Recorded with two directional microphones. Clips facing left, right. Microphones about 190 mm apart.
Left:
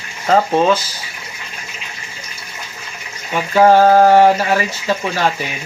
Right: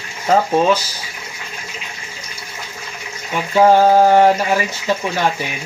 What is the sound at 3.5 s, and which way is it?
Speech, 15° right (ahead or behind).